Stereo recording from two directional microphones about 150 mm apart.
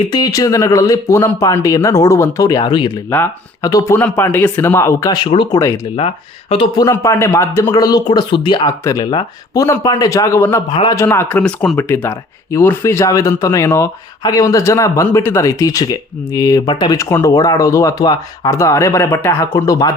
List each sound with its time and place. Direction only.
0.1 s speech: 25° left (ahead or behind)
5.5 s speech: 20° left (ahead or behind)
6.0 s speech: 40° left (ahead or behind)
6.7 s speech: 20° left (ahead or behind)
10.7 s speech: 30° left (ahead or behind)
10.9 s speech: 20° left (ahead or behind)
11.8 s speech: 15° left (ahead or behind)